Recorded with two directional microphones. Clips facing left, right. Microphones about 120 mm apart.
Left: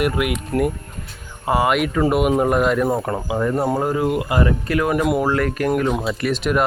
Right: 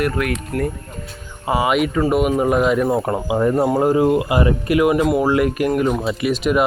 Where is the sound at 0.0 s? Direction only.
15° left (ahead or behind).